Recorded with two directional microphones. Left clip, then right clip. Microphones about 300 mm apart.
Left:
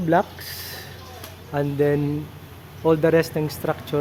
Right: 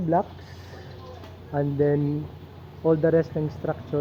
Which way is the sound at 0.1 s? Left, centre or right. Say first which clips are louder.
Left 4 dB; left.